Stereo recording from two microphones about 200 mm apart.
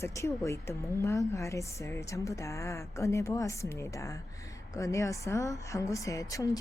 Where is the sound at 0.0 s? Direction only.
15° left (ahead or behind).